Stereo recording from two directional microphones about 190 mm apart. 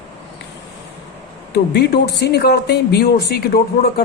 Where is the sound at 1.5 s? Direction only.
60° left (ahead or behind).